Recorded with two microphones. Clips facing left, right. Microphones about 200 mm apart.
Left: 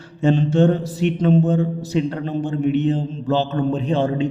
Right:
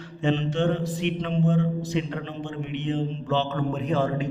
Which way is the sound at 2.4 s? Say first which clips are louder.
Left 14 dB; 40° left (ahead or behind).